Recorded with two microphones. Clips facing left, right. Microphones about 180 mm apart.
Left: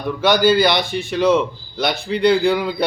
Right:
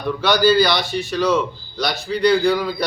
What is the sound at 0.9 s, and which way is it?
A man's voice, 25° left (ahead or behind).